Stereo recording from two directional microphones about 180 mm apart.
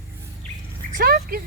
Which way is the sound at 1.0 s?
60° right (ahead or behind).